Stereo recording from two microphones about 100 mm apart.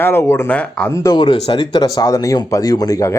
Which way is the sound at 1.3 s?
90° left.